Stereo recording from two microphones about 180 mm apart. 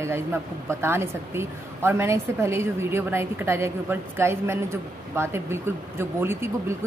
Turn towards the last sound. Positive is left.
turn(degrees=-15)  # may be behind; listen again after turning